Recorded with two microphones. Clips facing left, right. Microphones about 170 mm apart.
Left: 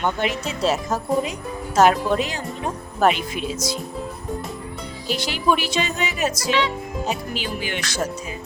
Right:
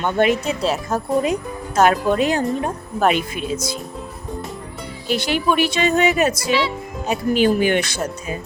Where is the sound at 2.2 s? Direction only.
55° right (ahead or behind).